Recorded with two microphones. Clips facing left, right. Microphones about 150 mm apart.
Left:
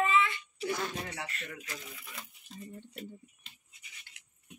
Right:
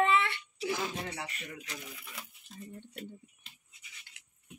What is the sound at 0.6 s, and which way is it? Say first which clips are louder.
Speech: even; 5° right (ahead or behind).